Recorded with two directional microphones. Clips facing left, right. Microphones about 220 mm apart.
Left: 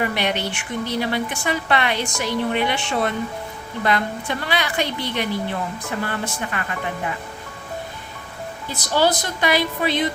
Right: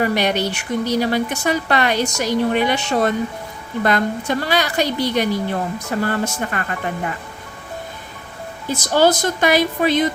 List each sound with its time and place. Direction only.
0.0 s a woman's voice: 40° right (ahead or behind)
8.7 s a woman's voice: 45° right (ahead or behind)